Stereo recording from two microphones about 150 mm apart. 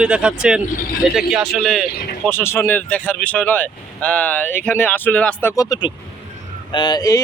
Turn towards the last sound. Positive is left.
turn(degrees=25)  # may be behind; listen again after turning